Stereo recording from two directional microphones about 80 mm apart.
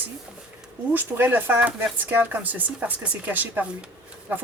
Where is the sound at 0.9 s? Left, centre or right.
Right.